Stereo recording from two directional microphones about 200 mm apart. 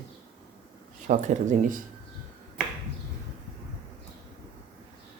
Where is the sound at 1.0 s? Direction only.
40° right (ahead or behind).